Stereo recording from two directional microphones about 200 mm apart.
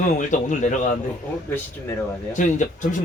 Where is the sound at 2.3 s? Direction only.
40° left (ahead or behind).